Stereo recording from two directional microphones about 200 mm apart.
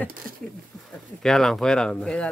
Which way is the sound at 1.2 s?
Centre (ahead or behind).